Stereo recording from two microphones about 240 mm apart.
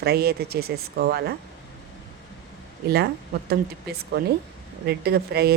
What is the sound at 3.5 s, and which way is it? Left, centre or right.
Speech, right.